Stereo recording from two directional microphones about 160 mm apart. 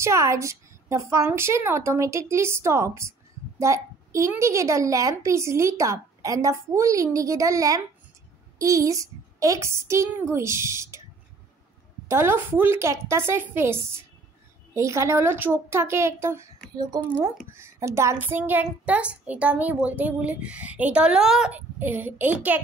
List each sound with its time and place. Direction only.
0.0 s a woman's voice: 15° right (ahead or behind)
12.1 s a child's voice: 15° right (ahead or behind)
17.6 s a child's voice: 15° right (ahead or behind)